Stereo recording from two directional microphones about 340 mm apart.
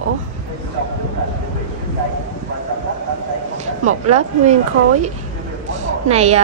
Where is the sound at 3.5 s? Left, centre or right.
Centre.